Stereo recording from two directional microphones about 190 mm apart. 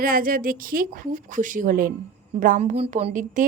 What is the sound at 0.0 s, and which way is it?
Speech, 45° right (ahead or behind).